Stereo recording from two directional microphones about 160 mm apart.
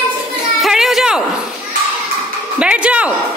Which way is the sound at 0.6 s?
Centre (ahead or behind).